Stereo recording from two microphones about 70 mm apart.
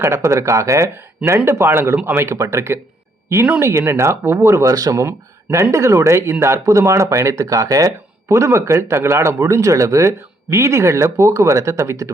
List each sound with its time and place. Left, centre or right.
0.0 s speech: right
4.7 s speech: right
4.9 s speech: right